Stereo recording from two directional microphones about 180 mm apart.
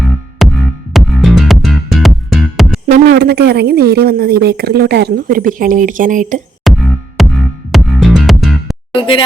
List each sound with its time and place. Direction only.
0.0 s music: centre (ahead or behind)
2.8 s a woman's voice: 55° right (ahead or behind)
6.7 s music: centre (ahead or behind)
9.0 s speech: 30° left (ahead or behind)